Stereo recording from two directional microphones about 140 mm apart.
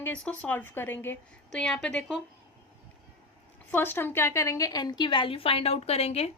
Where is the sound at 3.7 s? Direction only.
15° left (ahead or behind).